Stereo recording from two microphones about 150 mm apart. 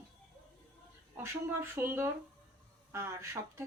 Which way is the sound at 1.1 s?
15° right (ahead or behind).